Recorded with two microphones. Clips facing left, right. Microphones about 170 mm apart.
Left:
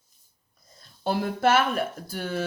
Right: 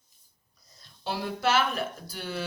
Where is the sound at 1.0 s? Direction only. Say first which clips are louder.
Left 5 dB; 50° left (ahead or behind).